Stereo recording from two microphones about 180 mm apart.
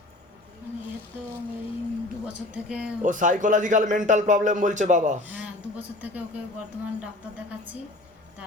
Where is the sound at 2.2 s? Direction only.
5° right (ahead or behind).